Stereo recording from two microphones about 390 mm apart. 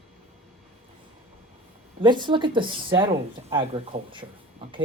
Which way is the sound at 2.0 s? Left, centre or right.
Centre.